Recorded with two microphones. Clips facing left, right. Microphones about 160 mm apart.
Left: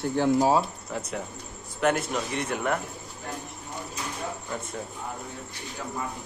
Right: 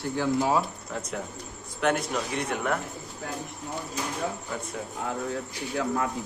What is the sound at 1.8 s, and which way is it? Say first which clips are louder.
Speech: left 1 dB; centre (ahead or behind).